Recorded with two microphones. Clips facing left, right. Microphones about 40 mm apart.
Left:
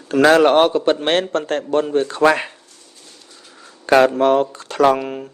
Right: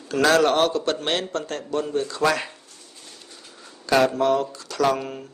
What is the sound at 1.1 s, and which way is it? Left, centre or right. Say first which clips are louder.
A man's voice: left 8 dB; left.